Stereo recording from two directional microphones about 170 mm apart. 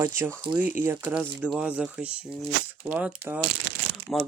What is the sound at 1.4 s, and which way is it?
Speech, 5° right (ahead or behind).